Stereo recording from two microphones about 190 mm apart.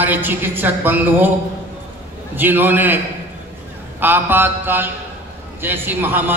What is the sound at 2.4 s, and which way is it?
A man's voice, 10° right (ahead or behind).